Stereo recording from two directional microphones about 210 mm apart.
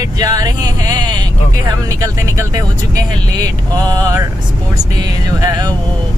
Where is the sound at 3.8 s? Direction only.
20° right (ahead or behind).